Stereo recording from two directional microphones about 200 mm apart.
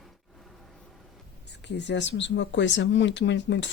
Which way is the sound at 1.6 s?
60° left (ahead or behind).